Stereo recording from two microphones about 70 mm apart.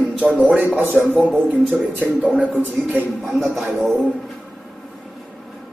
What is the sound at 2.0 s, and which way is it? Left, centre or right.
Speech, centre.